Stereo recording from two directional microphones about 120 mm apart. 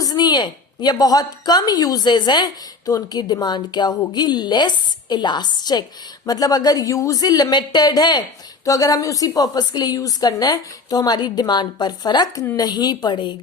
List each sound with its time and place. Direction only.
0.0 s a woman's voice: 35° left (ahead or behind)